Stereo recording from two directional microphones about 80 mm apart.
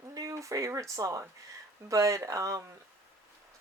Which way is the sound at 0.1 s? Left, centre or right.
Right.